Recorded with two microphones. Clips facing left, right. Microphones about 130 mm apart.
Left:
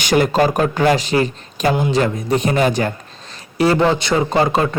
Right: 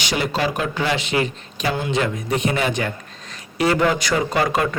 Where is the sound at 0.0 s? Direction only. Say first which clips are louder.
Left 7 dB; 50° left (ahead or behind).